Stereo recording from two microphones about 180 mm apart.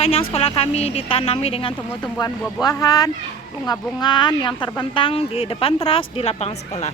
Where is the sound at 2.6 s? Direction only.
20° left (ahead or behind).